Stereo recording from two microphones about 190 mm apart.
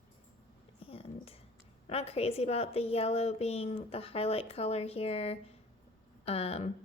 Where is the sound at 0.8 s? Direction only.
30° left (ahead or behind).